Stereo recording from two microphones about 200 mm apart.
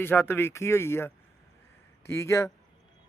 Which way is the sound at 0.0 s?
10° left (ahead or behind).